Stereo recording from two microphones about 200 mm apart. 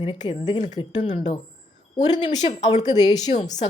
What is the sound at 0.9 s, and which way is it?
Speech, 35° left (ahead or behind).